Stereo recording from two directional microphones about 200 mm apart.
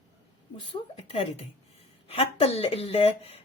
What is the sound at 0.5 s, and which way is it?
Speech, 30° left (ahead or behind).